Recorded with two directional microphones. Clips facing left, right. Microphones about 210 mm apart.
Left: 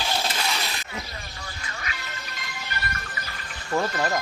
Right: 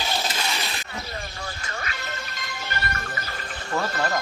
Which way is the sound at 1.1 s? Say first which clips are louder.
Right 5 dB; 45° right (ahead or behind).